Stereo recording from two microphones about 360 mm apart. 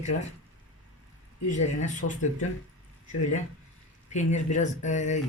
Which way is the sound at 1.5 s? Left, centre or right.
Centre.